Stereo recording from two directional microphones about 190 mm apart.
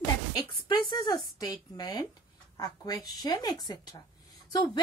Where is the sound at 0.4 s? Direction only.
25° left (ahead or behind).